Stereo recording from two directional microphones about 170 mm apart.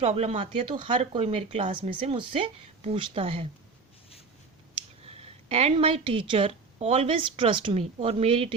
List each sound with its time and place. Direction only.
0.0 s speech: 40° right (ahead or behind)
4.7 s speech: 35° right (ahead or behind)